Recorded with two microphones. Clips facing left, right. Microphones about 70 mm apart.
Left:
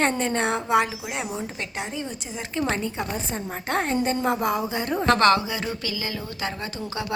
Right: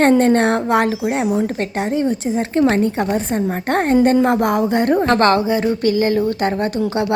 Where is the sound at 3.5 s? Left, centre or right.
Right.